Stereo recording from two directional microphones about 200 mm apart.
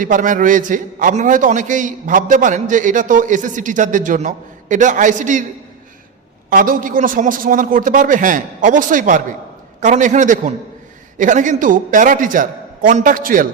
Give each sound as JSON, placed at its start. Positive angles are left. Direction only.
{"t": 0.0, "sound": "a man's voice", "side_deg": -40}
{"t": 6.5, "sound": "a man's voice", "side_deg": -45}